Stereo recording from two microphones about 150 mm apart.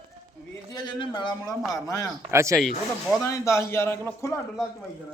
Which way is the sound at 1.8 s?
25° left (ahead or behind).